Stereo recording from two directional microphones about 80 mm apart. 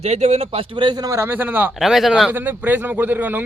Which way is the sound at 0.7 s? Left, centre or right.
Right.